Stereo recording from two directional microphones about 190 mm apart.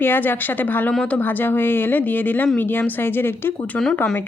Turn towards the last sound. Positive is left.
turn(degrees=5)  # may be behind; listen again after turning